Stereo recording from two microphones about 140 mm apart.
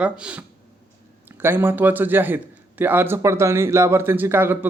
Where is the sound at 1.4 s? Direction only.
15° right (ahead or behind).